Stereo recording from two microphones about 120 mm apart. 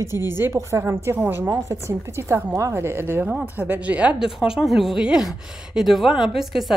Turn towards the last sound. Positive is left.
turn(degrees=0)  # may be behind; listen again after turning